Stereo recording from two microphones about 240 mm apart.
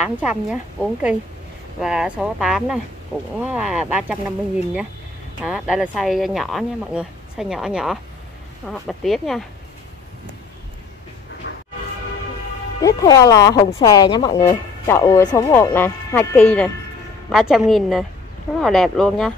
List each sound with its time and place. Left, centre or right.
0.0 s speech: centre
5.4 s speech: centre
11.4 s music: left
12.8 s speech: centre